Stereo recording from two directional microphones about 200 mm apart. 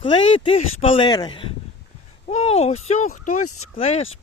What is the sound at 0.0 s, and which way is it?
Speech, 25° left (ahead or behind).